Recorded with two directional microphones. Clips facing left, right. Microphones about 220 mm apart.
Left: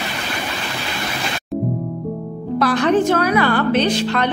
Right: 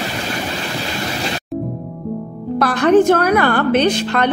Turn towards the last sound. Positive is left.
turn(degrees=-50)  # may be behind; listen again after turning